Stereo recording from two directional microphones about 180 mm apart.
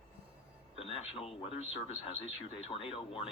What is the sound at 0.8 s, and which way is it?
Speech, 35° left (ahead or behind).